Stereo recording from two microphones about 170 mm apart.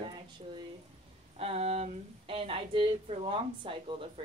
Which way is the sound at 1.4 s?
35° right (ahead or behind).